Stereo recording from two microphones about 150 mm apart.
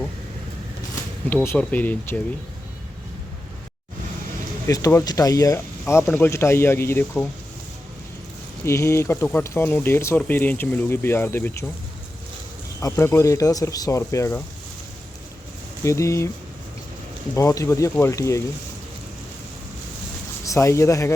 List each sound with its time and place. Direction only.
1.3 s speech: 10° left (ahead or behind)
4.6 s speech: 20° left (ahead or behind)
8.6 s speech: 20° left (ahead or behind)
12.8 s speech: 20° left (ahead or behind)
15.8 s speech: 20° left (ahead or behind)
17.3 s speech: 20° left (ahead or behind)
20.4 s speech: 20° left (ahead or behind)